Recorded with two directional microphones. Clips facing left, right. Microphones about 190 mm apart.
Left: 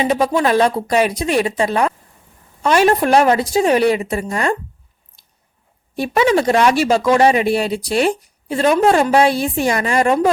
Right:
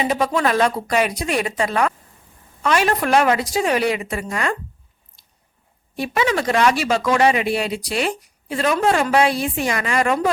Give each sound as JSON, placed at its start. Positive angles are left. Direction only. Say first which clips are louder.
{"t": 0.0, "sound": "a woman's voice", "louder": "left 3 dB", "side_deg": 30}
{"t": 6.0, "sound": "a woman's voice", "louder": "left 6 dB", "side_deg": 30}